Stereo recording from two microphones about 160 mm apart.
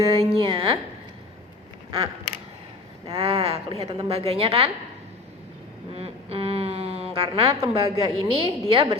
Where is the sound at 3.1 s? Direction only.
35° right (ahead or behind).